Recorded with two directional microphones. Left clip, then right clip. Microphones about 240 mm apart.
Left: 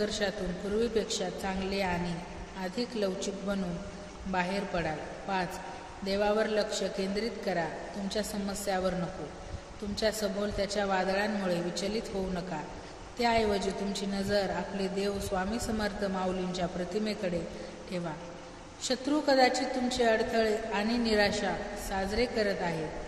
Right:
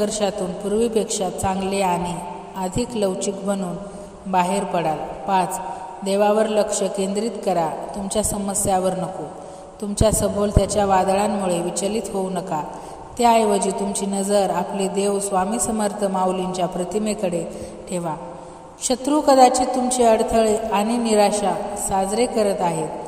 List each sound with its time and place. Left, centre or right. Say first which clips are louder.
0.0 s a woman's voice: right 10 dB; right
9.9 s a woman's voice: right 11 dB; right
18.9 s a woman's voice: right 11 dB; right